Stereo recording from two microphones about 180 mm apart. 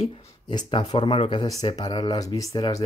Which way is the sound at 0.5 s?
25° left (ahead or behind).